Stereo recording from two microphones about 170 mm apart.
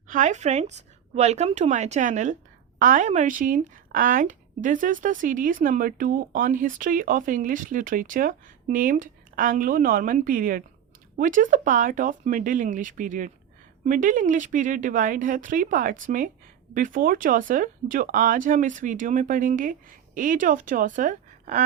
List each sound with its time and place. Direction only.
0.1 s speech: 45° right (ahead or behind)